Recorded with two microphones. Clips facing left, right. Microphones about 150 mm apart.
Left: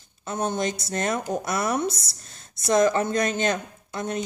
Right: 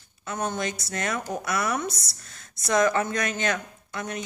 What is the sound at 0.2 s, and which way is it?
A woman's voice, 25° left (ahead or behind).